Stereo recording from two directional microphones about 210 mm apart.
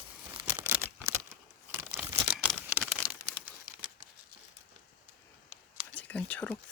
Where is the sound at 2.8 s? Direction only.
5° left (ahead or behind).